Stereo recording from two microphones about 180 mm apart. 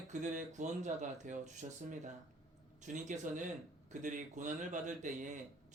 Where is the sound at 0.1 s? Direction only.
45° right (ahead or behind).